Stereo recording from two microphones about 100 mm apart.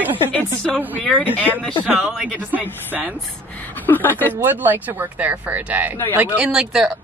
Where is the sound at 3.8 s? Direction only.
20° left (ahead or behind).